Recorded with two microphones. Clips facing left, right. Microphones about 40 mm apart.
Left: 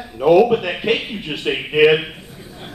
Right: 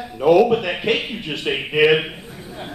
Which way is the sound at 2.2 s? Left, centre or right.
Centre.